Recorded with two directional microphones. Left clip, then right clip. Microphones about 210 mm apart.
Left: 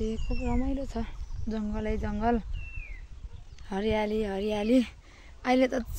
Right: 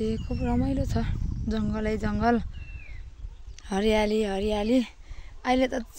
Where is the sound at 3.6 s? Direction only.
60° right (ahead or behind).